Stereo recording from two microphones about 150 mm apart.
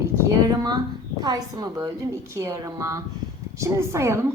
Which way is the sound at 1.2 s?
25° right (ahead or behind).